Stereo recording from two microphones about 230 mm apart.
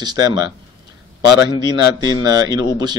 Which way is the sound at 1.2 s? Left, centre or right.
Left.